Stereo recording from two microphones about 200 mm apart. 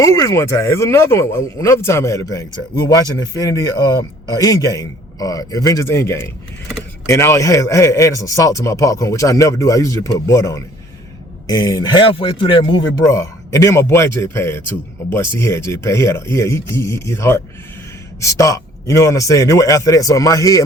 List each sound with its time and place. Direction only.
0.0 s a man's voice: 15° left (ahead or behind)
4.4 s a man's voice: 15° left (ahead or behind)